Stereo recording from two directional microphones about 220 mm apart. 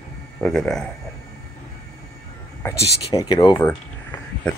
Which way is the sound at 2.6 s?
15° left (ahead or behind).